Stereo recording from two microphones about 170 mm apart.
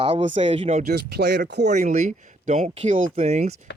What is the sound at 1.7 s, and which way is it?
Speech, 45° right (ahead or behind).